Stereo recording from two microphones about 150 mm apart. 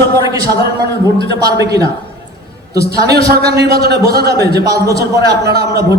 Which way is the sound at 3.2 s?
90° right.